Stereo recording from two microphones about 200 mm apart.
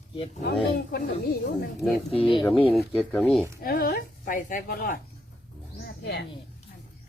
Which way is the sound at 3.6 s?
45° left (ahead or behind).